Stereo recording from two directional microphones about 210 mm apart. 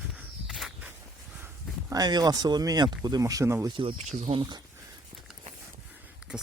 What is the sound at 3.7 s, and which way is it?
Speech, 25° right (ahead or behind).